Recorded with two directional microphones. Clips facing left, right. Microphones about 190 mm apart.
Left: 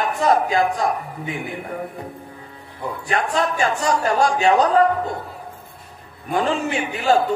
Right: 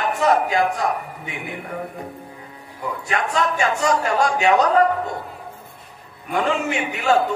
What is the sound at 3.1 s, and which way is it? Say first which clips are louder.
A man's voice: left 1 dB; 35° left (ahead or behind).